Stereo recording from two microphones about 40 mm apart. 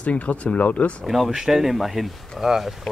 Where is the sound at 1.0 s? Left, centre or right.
Centre.